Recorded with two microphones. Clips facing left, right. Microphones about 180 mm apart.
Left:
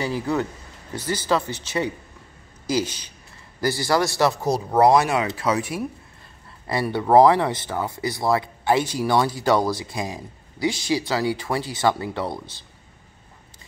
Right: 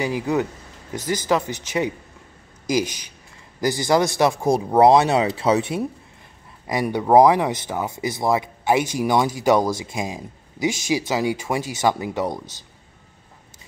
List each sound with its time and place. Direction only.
0.0 s speech: 15° right (ahead or behind)
6.7 s speech: 15° right (ahead or behind)